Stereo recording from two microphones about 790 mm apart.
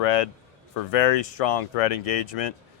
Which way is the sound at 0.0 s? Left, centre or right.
Left.